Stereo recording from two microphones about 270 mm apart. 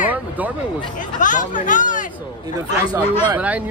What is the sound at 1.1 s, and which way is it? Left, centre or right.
Speech, left.